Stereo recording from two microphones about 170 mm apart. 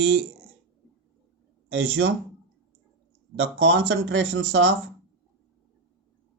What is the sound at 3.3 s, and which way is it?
Speech, 90° right.